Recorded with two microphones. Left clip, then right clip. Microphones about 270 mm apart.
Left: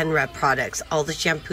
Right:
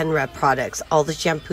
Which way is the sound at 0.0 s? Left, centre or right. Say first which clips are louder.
Right 1 dB; centre.